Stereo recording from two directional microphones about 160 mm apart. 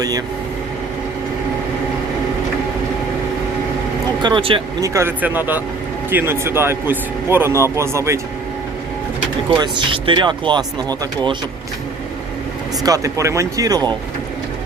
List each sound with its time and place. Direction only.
4.2 s speech: 30° right (ahead or behind)
4.8 s speech: 15° right (ahead or behind)
9.5 s speech: 30° right (ahead or behind)
12.8 s speech: 20° right (ahead or behind)